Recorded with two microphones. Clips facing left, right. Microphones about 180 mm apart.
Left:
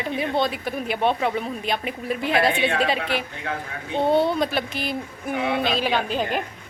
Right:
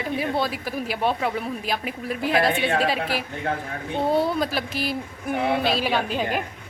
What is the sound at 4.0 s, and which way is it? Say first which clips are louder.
Speech: left 2 dB; 25° left (ahead or behind).